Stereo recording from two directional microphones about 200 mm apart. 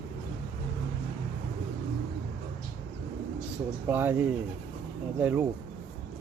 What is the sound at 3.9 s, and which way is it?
A man's voice, 10° right (ahead or behind).